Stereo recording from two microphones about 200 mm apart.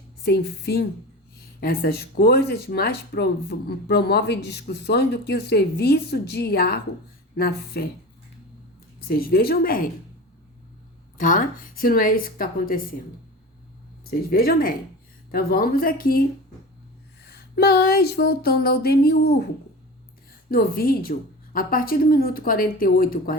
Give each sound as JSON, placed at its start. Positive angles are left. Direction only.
{"t": 0.2, "sound": "speech", "side_deg": 55}
{"t": 9.0, "sound": "speech", "side_deg": 50}
{"t": 11.2, "sound": "speech", "side_deg": 45}
{"t": 14.0, "sound": "speech", "side_deg": 50}
{"t": 17.2, "sound": "speech", "side_deg": 50}
{"t": 20.5, "sound": "speech", "side_deg": 50}